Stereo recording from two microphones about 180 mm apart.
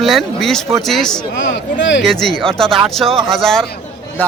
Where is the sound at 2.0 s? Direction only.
Centre (ahead or behind).